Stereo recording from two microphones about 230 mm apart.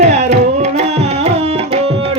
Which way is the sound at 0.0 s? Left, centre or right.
Right.